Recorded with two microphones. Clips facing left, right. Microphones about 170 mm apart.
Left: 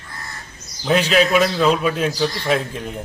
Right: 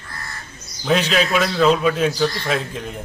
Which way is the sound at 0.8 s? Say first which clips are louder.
Left 2 dB; 5° left (ahead or behind).